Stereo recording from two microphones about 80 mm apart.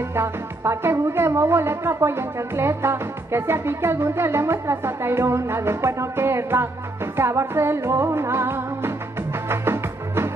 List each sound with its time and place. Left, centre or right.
0.1 s speech: right
9.5 s music: right